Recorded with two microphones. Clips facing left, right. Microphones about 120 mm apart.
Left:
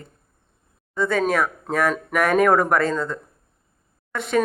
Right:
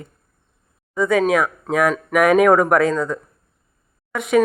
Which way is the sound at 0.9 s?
10° right (ahead or behind).